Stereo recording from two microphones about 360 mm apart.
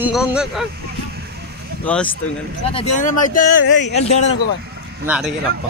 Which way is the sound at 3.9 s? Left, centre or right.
Centre.